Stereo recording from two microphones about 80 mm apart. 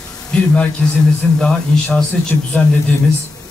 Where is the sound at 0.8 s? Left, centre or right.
Centre.